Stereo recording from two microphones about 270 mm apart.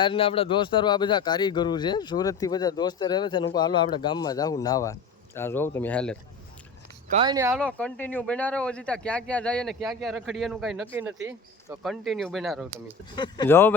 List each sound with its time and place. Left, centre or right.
0.0 s speech: centre
7.1 s speech: centre
7.6 s speech: centre
11.8 s speech: centre
13.1 s speech: centre